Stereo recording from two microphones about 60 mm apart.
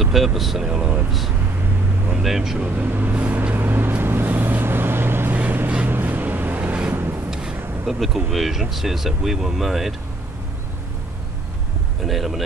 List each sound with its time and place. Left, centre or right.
0.0 s speech: centre
2.2 s speech: centre
2.7 s vehicle: right
7.8 s speech: centre
12.0 s speech: centre